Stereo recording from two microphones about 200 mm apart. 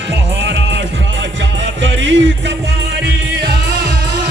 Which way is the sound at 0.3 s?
65° right (ahead or behind).